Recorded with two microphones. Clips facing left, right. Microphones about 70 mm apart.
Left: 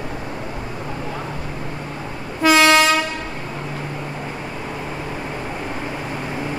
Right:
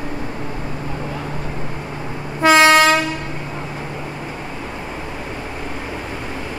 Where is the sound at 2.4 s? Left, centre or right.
Right.